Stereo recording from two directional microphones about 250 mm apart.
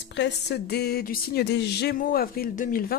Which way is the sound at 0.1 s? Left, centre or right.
Left.